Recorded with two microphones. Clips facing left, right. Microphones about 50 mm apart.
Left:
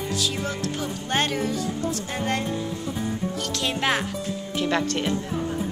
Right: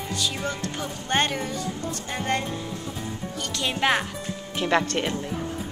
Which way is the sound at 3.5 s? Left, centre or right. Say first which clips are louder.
Right 2 dB; centre.